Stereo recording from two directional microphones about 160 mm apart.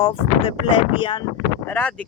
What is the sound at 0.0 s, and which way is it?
Speech, 35° left (ahead or behind).